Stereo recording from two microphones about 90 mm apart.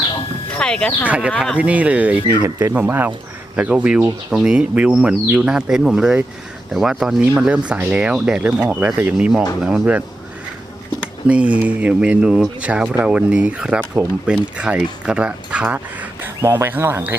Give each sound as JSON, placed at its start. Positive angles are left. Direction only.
{"t": 0.5, "sound": "speech", "side_deg": 10}
{"t": 1.0, "sound": "speech", "side_deg": -15}
{"t": 9.1, "sound": "speech", "side_deg": -5}
{"t": 11.3, "sound": "speech", "side_deg": -15}
{"t": 16.2, "sound": "speech", "side_deg": -30}